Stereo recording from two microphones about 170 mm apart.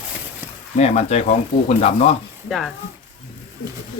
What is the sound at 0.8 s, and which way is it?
Speech, 40° left (ahead or behind).